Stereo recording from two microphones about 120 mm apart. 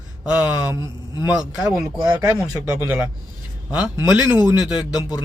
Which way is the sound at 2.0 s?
25° right (ahead or behind).